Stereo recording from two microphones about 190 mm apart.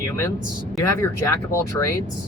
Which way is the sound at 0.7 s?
15° left (ahead or behind).